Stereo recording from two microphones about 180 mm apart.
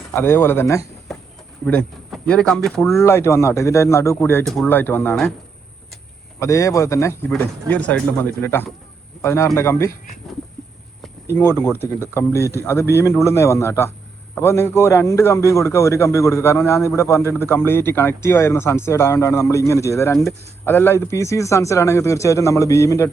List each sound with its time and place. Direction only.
0.1 s a man's voice: 15° left (ahead or behind)
2.0 s speech: 5° left (ahead or behind)
2.9 s a man's voice: 15° left (ahead or behind)
6.4 s a man's voice: 15° left (ahead or behind)
11.3 s a man's voice: 15° left (ahead or behind)